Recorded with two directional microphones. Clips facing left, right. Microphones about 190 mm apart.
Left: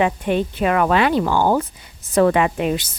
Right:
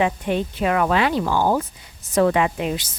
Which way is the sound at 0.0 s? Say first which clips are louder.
Left 2 dB; 60° left (ahead or behind).